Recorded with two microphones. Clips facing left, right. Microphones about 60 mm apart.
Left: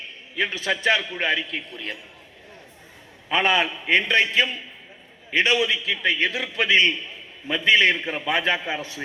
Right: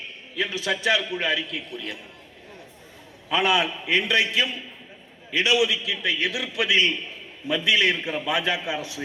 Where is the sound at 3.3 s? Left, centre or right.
Left.